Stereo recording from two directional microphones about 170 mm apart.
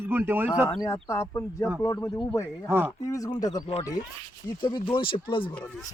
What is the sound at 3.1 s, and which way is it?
Speech, 20° left (ahead or behind).